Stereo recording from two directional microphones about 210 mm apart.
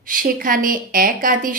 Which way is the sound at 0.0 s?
40° right (ahead or behind).